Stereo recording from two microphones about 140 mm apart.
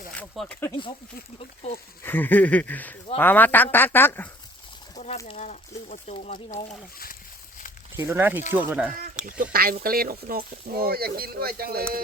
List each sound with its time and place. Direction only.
0.1 s speech: 5° left (ahead or behind)
1.4 s speech: 50° left (ahead or behind)
2.0 s speech: 15° left (ahead or behind)
4.9 s speech: 55° left (ahead or behind)
6.7 s speech: 90° left
7.9 s speech: 20° right (ahead or behind)
9.4 s speech: 90° right